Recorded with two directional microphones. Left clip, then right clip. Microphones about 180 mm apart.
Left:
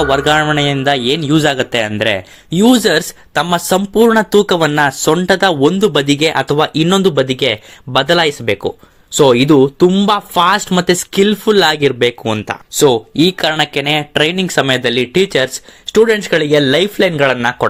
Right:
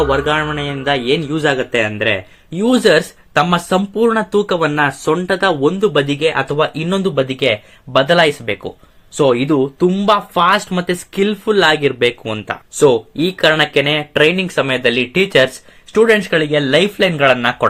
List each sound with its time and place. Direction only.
0.1 s a man's voice: 55° left (ahead or behind)